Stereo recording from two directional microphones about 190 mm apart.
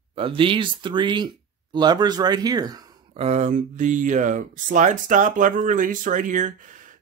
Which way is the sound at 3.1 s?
35° right (ahead or behind).